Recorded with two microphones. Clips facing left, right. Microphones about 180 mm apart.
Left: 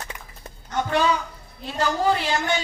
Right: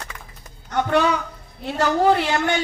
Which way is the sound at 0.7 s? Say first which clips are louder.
Right 3 dB; 60° right (ahead or behind).